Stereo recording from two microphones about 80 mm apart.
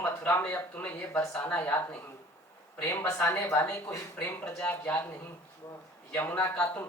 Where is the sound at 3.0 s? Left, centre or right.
Left.